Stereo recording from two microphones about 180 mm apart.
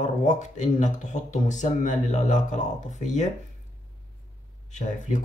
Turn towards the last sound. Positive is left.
turn(degrees=45)  # may be behind; listen again after turning